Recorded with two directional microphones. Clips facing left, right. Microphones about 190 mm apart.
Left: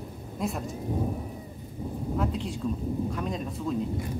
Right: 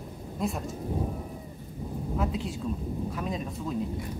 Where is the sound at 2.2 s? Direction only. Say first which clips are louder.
Left 1 dB; 5° right (ahead or behind).